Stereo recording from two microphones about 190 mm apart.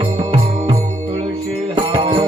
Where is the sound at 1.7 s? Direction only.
25° right (ahead or behind).